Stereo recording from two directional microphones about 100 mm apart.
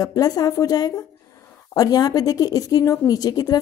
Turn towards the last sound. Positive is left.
turn(degrees=40)  # may be behind; listen again after turning